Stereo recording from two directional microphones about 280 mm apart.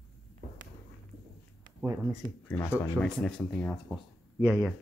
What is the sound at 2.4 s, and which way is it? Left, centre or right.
Speech, centre.